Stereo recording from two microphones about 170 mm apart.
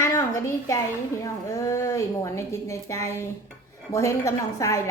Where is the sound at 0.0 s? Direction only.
15° left (ahead or behind).